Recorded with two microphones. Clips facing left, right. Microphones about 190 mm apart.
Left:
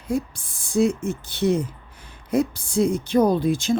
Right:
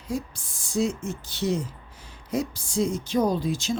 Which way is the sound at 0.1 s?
55° left (ahead or behind).